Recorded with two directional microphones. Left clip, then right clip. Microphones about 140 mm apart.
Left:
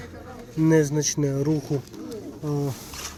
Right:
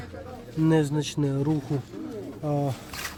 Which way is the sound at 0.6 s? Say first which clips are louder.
Left 4 dB; 20° right (ahead or behind).